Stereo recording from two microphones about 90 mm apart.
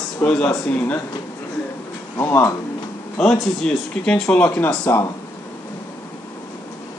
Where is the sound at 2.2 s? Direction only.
30° left (ahead or behind).